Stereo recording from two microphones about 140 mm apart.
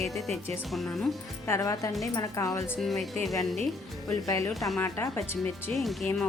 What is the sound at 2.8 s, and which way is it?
Speech, centre (ahead or behind).